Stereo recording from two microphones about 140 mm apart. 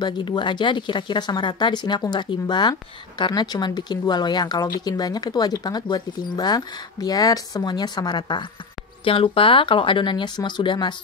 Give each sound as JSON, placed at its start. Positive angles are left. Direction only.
{"t": 0.0, "sound": "speech", "side_deg": 35}